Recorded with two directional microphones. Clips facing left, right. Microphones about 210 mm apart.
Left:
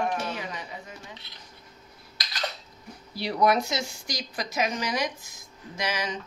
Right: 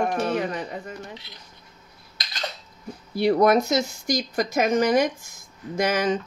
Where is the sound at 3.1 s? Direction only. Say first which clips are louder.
Right 6 dB; 50° right (ahead or behind).